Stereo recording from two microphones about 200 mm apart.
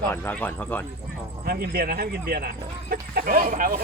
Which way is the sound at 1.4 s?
50° right (ahead or behind).